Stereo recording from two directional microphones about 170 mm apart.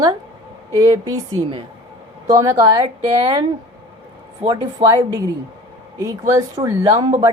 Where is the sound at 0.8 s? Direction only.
20° right (ahead or behind).